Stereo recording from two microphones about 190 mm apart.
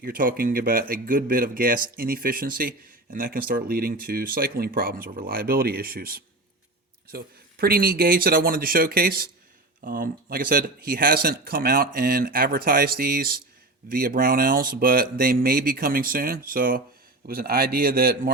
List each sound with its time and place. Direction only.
0.0 s speech: 45° right (ahead or behind)